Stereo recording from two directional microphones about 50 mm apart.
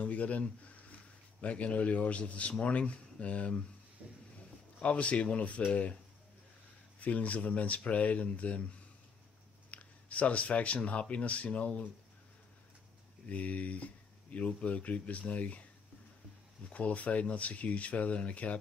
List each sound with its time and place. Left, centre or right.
0.0 s a sound: left
1.4 s speech: left
4.0 s a sound: right
4.7 s speech: left
7.0 s speech: left
9.7 s speech: left
13.3 s speech: left
16.6 s speech: left